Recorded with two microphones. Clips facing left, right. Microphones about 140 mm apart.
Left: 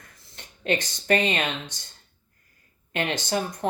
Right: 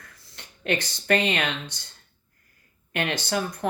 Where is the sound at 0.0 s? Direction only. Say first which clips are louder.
Even; 20° left (ahead or behind).